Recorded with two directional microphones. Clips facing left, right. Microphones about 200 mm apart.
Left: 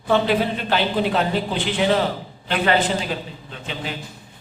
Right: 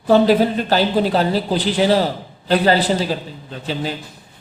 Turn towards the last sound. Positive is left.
turn(degrees=-35)  # may be behind; listen again after turning